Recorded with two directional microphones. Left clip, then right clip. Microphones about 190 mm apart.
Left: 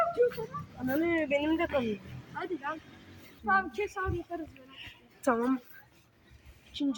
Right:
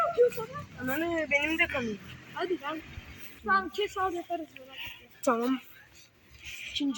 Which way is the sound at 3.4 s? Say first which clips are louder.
Right 1 dB; 25° left (ahead or behind).